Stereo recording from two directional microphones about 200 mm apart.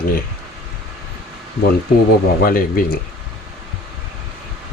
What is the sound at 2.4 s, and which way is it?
Speech, 45° left (ahead or behind).